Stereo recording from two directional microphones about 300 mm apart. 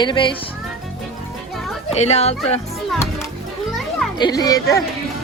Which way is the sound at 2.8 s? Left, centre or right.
Centre.